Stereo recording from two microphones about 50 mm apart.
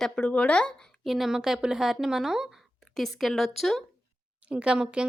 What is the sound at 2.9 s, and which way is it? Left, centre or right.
Speech, centre.